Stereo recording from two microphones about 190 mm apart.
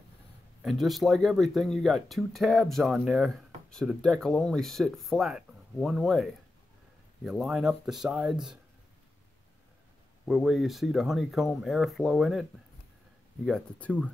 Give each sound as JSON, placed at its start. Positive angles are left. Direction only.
{"t": 0.6, "sound": "speech", "side_deg": 0}
{"t": 7.2, "sound": "speech", "side_deg": 0}
{"t": 10.2, "sound": "speech", "side_deg": 0}
{"t": 13.5, "sound": "speech", "side_deg": 10}